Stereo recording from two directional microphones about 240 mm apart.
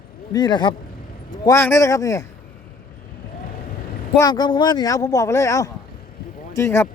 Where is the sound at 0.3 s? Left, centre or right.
Centre.